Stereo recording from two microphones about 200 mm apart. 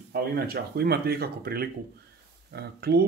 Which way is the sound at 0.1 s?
50° right (ahead or behind).